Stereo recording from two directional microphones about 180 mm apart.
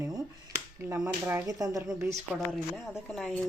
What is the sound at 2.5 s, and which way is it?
Speech, centre (ahead or behind).